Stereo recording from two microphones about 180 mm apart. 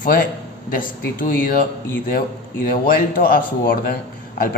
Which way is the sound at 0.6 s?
50° left (ahead or behind).